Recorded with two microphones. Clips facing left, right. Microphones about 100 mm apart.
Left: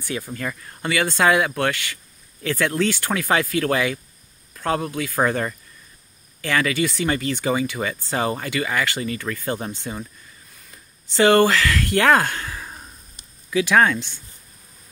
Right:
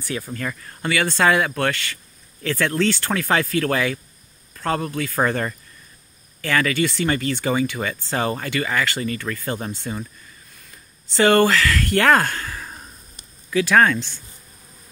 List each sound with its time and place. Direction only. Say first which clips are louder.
0.0 s speech: even; 20° left (ahead or behind)
11.1 s speech: even; 15° left (ahead or behind)